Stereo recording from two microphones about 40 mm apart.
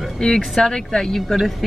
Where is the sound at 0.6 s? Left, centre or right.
Centre.